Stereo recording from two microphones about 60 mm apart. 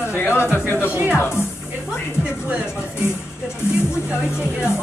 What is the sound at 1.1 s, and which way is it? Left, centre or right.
Music, left.